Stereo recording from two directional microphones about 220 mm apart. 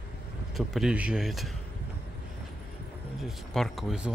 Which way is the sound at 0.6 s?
Centre (ahead or behind).